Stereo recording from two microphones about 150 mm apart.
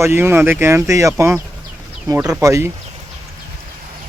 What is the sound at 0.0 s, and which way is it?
Speech, 15° right (ahead or behind).